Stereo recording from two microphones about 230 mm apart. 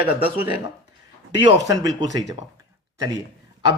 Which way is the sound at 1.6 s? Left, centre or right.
Centre.